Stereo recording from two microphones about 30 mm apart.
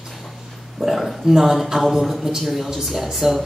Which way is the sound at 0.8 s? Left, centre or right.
Centre.